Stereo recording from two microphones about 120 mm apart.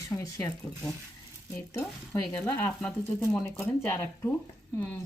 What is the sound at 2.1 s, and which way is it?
Speech, 25° left (ahead or behind).